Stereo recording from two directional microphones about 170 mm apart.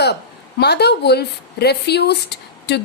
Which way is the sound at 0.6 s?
75° left (ahead or behind).